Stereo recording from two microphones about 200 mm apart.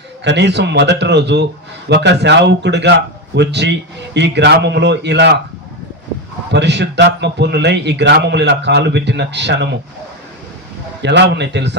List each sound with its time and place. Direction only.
0.3 s a man's voice: 60° right (ahead or behind)
6.5 s a man's voice: 60° right (ahead or behind)
11.0 s a man's voice: 60° right (ahead or behind)